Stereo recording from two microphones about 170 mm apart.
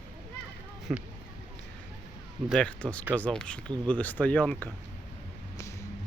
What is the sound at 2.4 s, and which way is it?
Speech, 5° left (ahead or behind).